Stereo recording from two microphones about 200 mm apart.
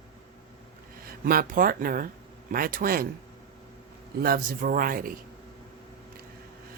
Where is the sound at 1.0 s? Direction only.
45° right (ahead or behind).